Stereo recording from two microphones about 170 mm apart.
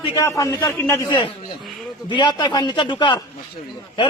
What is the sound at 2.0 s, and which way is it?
A man's voice, 25° left (ahead or behind).